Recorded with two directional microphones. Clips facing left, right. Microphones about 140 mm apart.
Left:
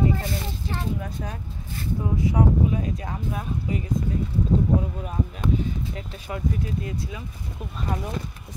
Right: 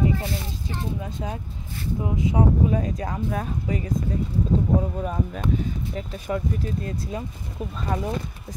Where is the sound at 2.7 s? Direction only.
40° right (ahead or behind).